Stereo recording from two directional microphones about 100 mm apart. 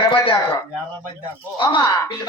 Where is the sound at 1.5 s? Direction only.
50° left (ahead or behind).